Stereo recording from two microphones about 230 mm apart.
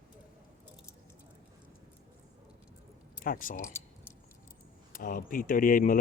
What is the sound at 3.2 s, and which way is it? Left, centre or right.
Speech, left.